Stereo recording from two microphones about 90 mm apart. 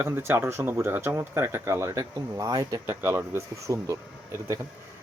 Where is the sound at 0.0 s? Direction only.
30° right (ahead or behind).